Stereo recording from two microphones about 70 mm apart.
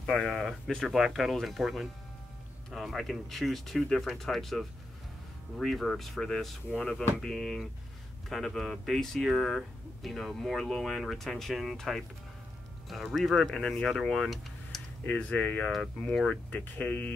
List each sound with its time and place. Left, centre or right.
0.0 s speech: centre
0.8 s speech: centre; by 17.1 s left